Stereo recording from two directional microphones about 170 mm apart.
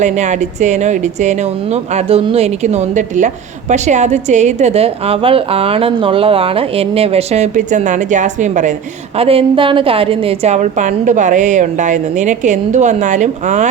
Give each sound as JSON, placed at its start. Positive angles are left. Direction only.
{"t": 0.0, "sound": "speech", "side_deg": -45}
{"t": 9.1, "sound": "a woman's voice", "side_deg": -35}